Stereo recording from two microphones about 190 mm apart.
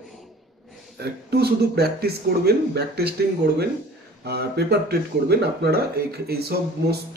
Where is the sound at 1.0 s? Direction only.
60° right (ahead or behind).